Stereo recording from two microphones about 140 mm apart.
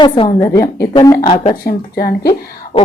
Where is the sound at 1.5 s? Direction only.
90° left.